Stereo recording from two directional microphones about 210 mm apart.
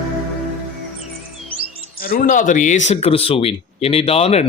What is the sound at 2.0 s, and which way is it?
A man's voice, 40° left (ahead or behind).